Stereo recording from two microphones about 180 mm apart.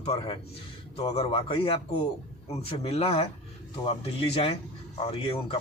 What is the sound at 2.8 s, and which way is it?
A man's voice, 35° left (ahead or behind).